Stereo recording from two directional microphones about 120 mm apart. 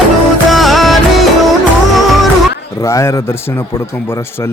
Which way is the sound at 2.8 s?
25° left (ahead or behind).